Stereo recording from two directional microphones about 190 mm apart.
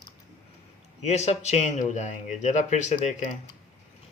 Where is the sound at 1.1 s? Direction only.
35° left (ahead or behind).